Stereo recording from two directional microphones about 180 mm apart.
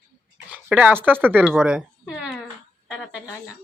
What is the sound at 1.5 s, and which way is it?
Cat, 5° right (ahead or behind).